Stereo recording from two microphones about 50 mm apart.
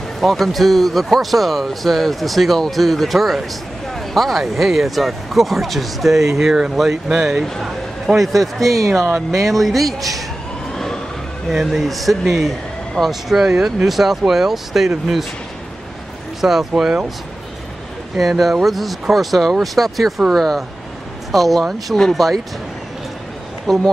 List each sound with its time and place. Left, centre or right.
0.2 s speech: centre
8.2 s speech: centre
10.7 s vehicle: centre
11.4 s speech: centre
16.3 s speech: centre
16.7 s speech: centre
18.1 s speech: centre
23.7 s speech: centre